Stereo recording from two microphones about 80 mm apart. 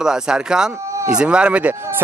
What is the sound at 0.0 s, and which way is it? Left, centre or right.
Speech, centre.